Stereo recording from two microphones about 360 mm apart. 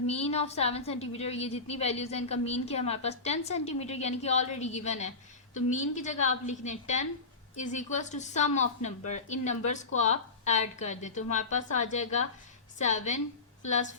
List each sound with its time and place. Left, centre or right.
0.1 s a woman's voice: centre